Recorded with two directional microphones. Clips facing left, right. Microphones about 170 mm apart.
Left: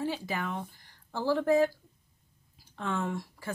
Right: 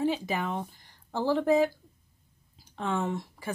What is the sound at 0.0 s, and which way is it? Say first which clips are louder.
Speech: right 4 dB; 20° right (ahead or behind).